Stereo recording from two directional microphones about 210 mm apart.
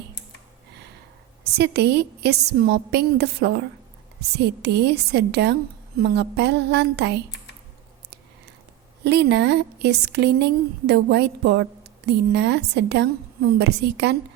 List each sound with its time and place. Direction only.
1.5 s a woman's voice: 50° right (ahead or behind)
9.0 s a woman's voice: 55° right (ahead or behind)